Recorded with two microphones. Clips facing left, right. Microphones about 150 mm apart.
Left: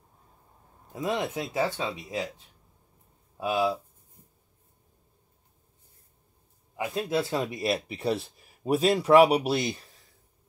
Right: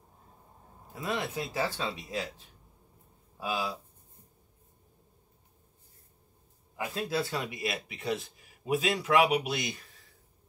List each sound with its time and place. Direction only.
0.9 s speech: 20° left (ahead or behind)
3.3 s speech: 25° left (ahead or behind)
6.8 s speech: 25° left (ahead or behind)